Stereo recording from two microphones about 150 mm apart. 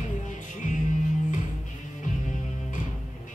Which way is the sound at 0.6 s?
55° left (ahead or behind).